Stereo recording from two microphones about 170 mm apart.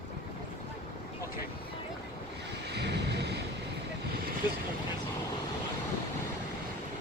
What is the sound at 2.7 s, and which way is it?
Thunder, 85° right.